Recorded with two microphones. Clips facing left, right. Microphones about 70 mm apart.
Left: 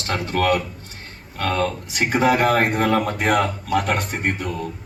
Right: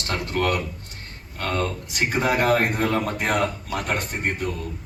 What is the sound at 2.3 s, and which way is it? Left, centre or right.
Speech, left.